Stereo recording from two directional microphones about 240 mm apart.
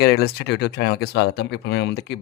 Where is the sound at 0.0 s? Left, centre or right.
Left.